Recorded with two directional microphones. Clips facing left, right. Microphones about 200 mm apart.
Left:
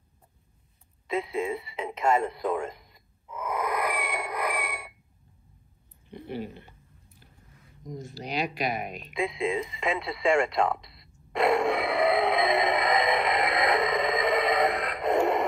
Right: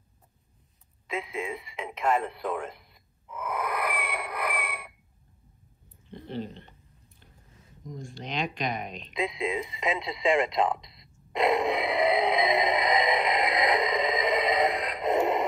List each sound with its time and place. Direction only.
2.0 s speech: 10° left (ahead or behind)
3.3 s a sound: 10° left (ahead or behind)
6.0 s speech: 10° left (ahead or behind)
8.0 s speech: 5° left (ahead or behind)
9.5 s radio: 20° right (ahead or behind)